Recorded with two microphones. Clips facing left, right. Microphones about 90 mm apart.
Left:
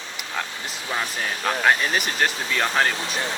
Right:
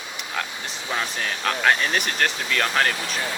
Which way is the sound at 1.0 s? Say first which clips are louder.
Even; 5° left (ahead or behind).